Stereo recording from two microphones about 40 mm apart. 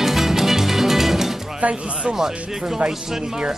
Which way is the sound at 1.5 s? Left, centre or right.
Right.